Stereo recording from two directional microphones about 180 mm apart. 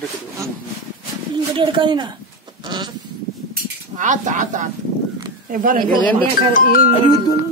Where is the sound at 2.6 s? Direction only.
25° right (ahead or behind).